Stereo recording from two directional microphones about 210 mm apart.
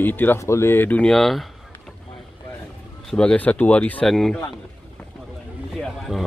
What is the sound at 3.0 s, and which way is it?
Speech, 5° left (ahead or behind).